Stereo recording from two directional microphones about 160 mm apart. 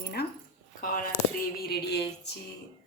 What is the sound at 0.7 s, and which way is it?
Speech, 60° left (ahead or behind).